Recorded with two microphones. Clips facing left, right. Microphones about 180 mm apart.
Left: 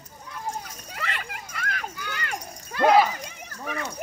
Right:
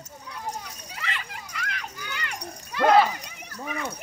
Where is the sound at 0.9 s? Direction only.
45° left (ahead or behind).